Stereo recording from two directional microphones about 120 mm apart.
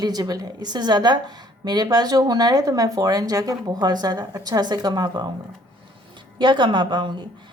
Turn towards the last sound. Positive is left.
turn(degrees=-40)  # may be behind; listen again after turning